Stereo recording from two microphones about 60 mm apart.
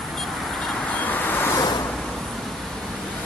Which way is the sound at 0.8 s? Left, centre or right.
Left.